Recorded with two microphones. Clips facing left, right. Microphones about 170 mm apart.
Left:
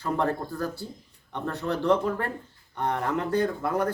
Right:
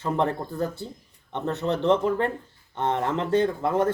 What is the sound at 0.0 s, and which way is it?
Speech, 20° right (ahead or behind).